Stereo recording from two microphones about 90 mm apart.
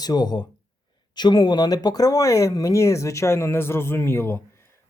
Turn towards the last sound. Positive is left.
turn(degrees=30)  # may be behind; listen again after turning